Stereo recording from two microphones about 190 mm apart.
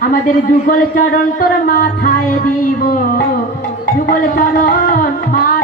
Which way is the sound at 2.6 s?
45° left (ahead or behind).